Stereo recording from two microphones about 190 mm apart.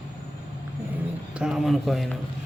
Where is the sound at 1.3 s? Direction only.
5° right (ahead or behind).